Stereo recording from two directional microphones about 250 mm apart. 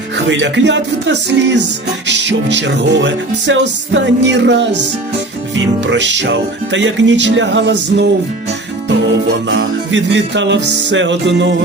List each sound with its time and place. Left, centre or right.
0.3 s music: right
9.5 s music: right